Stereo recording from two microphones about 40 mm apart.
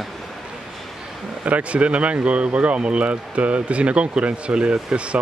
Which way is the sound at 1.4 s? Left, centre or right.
Right.